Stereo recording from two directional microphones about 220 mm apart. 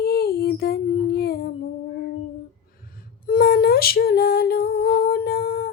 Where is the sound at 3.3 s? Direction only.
45° left (ahead or behind).